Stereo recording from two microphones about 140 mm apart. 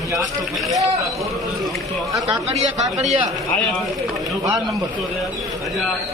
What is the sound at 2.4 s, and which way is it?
Speech, 50° right (ahead or behind).